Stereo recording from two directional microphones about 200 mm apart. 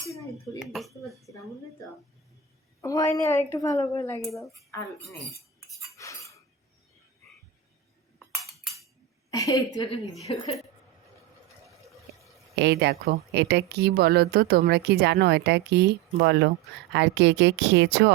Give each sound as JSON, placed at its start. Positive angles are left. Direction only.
{"t": 0.6, "sound": "dishes", "side_deg": 0}
{"t": 2.8, "sound": "speech", "side_deg": 15}
{"t": 6.0, "sound": "a sound", "side_deg": 15}
{"t": 9.3, "sound": "speech", "side_deg": 15}
{"t": 12.5, "sound": "a woman's voice", "side_deg": -60}